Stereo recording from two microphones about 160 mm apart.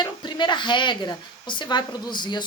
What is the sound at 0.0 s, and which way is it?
Speech, 30° left (ahead or behind).